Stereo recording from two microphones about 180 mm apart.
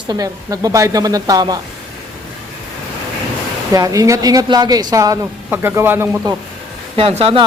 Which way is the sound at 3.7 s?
20° right (ahead or behind).